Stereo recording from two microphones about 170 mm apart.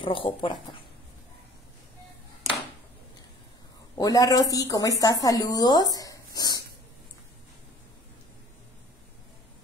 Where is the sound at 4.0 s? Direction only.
20° left (ahead or behind).